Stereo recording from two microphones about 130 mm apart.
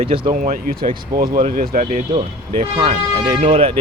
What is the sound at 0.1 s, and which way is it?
Speech, 45° right (ahead or behind).